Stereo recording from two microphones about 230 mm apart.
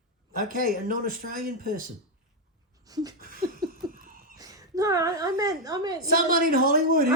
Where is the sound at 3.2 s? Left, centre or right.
Right.